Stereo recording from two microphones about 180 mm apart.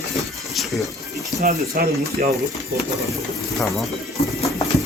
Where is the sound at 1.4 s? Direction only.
50° right (ahead or behind).